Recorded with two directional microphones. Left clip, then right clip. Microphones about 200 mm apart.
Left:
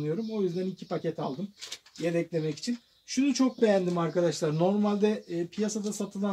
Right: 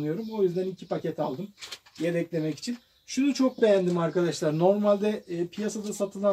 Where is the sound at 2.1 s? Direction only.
35° left (ahead or behind).